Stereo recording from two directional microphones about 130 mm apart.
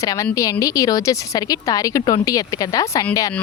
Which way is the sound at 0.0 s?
25° left (ahead or behind).